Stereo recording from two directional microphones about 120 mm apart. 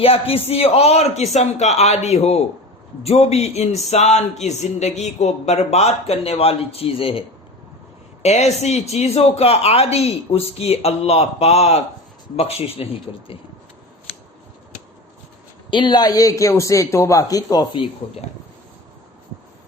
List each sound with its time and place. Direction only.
0.0 s speech: 55° left (ahead or behind)
8.2 s speech: 65° left (ahead or behind)
15.7 s a man's voice: 40° left (ahead or behind)